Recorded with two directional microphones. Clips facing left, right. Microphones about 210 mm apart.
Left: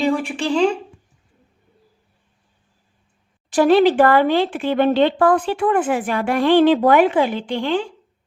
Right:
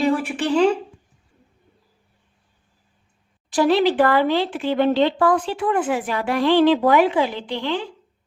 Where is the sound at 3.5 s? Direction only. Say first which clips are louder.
Left 4 dB; 50° left (ahead or behind).